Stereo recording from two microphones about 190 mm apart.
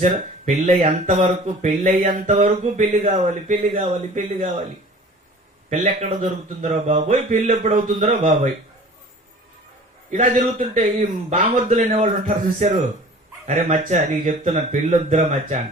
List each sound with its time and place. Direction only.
0.0 s speech: 40° right (ahead or behind)
5.7 s speech: 40° right (ahead or behind)
10.1 s speech: 40° right (ahead or behind)